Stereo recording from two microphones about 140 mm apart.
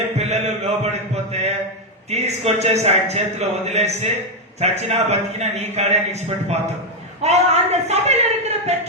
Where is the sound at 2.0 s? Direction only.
50° right (ahead or behind).